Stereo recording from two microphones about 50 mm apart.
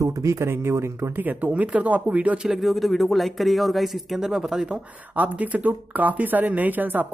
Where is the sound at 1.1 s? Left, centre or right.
Right.